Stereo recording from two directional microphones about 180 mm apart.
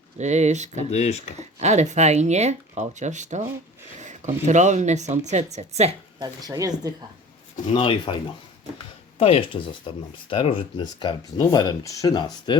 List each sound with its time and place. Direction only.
0.2 s speech: 40° right (ahead or behind)
0.9 s speech: 40° left (ahead or behind)
1.4 s speech: 40° right (ahead or behind)
6.1 s speech: 20° right (ahead or behind)
7.7 s speech: 30° left (ahead or behind)
9.1 s speech: 30° left (ahead or behind)